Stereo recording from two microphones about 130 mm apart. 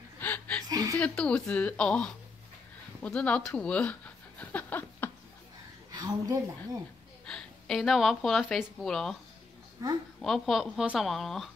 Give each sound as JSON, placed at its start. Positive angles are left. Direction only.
{"t": 0.2, "sound": "chuckle", "side_deg": 10}
{"t": 0.7, "sound": "a sound", "side_deg": -25}
{"t": 0.9, "sound": "speech", "side_deg": 10}
{"t": 4.4, "sound": "a sound", "side_deg": 10}
{"t": 5.9, "sound": "a woman's voice", "side_deg": -30}
{"t": 7.2, "sound": "a woman's voice", "side_deg": 5}
{"t": 9.8, "sound": "speech", "side_deg": -30}
{"t": 10.2, "sound": "speech", "side_deg": 0}